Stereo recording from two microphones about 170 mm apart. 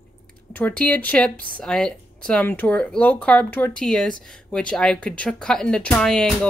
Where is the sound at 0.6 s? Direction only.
10° left (ahead or behind).